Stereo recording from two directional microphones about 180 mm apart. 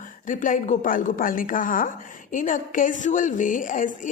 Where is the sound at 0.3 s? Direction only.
45° left (ahead or behind).